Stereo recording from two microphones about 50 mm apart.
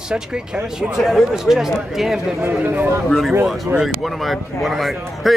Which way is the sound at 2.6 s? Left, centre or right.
Right.